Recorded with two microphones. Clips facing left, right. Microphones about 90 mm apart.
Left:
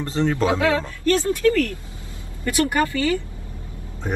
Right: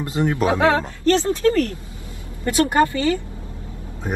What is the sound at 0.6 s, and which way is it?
Speech, 30° right (ahead or behind).